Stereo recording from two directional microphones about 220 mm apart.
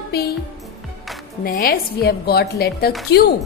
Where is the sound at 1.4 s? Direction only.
40° left (ahead or behind).